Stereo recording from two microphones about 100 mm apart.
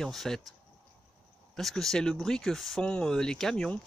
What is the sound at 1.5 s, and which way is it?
Speech, 5° left (ahead or behind).